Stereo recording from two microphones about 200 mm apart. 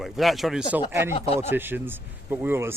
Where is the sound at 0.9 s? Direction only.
15° right (ahead or behind).